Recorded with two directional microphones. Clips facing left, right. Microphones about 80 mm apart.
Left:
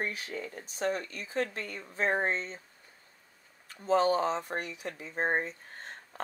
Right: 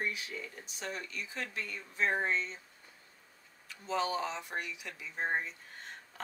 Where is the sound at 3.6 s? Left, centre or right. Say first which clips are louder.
Left 8 dB; left.